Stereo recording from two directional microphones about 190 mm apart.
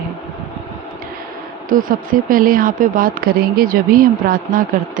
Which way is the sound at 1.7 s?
45° right (ahead or behind).